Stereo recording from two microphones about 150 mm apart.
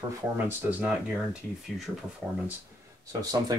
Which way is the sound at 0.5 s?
10° right (ahead or behind).